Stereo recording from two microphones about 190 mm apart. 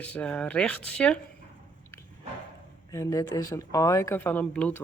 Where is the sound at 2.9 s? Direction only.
15° left (ahead or behind).